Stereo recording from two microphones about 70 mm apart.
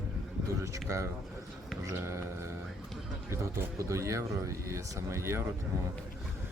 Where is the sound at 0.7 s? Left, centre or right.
Right.